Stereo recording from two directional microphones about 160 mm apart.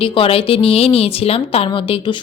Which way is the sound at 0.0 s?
35° left (ahead or behind).